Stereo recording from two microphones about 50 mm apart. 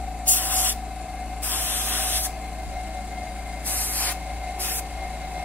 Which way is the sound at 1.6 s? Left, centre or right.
Right.